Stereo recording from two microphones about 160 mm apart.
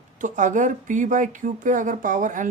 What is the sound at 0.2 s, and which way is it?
Speech, 50° right (ahead or behind).